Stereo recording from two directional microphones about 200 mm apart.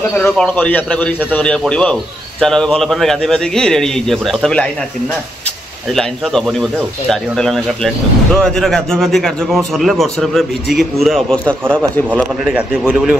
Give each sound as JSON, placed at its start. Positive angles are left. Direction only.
{"t": 0.1, "sound": "a man's voice", "side_deg": 5}
{"t": 5.9, "sound": "speech", "side_deg": 0}